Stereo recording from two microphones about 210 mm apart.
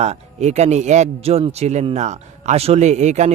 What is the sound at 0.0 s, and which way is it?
A man's voice, 30° right (ahead or behind).